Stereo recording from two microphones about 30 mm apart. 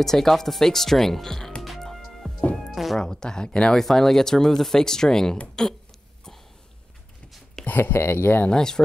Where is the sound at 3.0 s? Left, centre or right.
Left.